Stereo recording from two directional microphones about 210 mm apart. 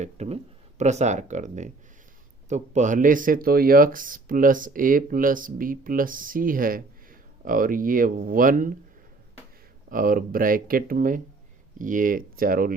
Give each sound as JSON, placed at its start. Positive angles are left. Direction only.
{"t": 0.0, "sound": "speech", "side_deg": -30}
{"t": 9.9, "sound": "speech", "side_deg": -40}